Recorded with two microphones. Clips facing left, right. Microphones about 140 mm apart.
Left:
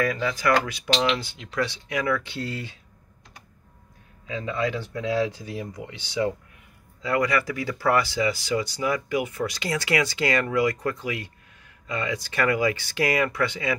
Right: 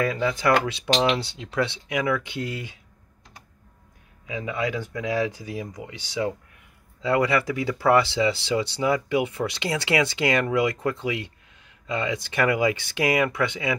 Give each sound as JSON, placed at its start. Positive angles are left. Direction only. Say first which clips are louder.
{"t": 0.0, "sound": "speech", "louder": "right 1 dB", "side_deg": -25}
{"t": 4.3, "sound": "speech", "louder": "left 1 dB", "side_deg": -10}
{"t": 7.0, "sound": "speech", "louder": "right 2 dB", "side_deg": -25}